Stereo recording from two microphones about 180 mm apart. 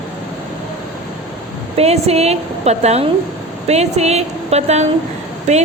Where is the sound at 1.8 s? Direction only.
35° right (ahead or behind).